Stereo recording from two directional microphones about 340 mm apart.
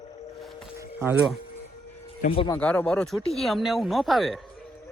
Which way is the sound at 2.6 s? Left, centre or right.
Centre.